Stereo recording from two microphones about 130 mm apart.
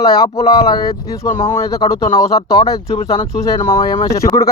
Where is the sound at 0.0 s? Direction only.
30° left (ahead or behind).